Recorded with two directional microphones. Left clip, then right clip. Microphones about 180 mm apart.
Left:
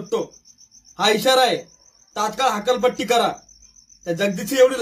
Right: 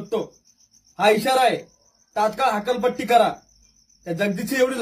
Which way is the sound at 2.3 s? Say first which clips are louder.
Left 6 dB; 25° right (ahead or behind).